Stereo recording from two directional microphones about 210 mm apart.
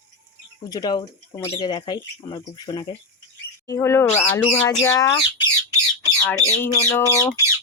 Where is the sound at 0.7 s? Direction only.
20° left (ahead or behind).